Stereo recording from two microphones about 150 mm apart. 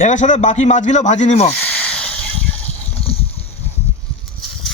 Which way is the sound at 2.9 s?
40° left (ahead or behind).